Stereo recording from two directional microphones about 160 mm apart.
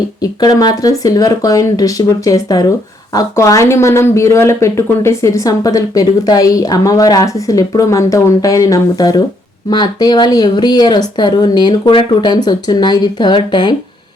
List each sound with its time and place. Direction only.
0.2 s speech: 25° left (ahead or behind)